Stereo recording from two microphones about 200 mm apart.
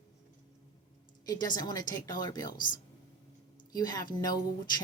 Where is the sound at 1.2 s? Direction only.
20° left (ahead or behind).